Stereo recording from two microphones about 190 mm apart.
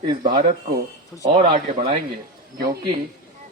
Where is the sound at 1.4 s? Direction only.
30° right (ahead or behind).